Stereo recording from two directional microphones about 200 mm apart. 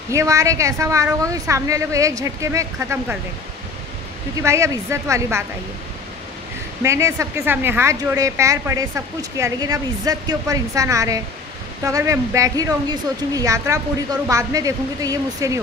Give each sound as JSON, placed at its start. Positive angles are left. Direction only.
{"t": 0.1, "sound": "a woman's voice", "side_deg": -15}
{"t": 4.4, "sound": "a woman's voice", "side_deg": -15}
{"t": 6.8, "sound": "a woman's voice", "side_deg": -15}